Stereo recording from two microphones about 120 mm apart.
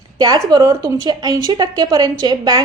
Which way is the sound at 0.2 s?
35° right (ahead or behind).